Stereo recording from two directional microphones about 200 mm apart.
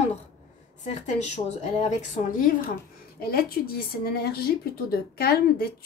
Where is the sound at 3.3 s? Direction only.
50° left (ahead or behind).